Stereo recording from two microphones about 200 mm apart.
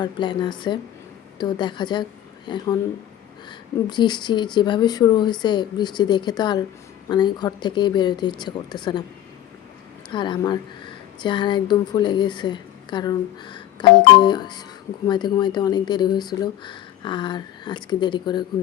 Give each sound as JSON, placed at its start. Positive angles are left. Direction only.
{"t": 0.0, "sound": "speech", "side_deg": 20}
{"t": 3.8, "sound": "speech", "side_deg": 20}
{"t": 10.1, "sound": "speech", "side_deg": 25}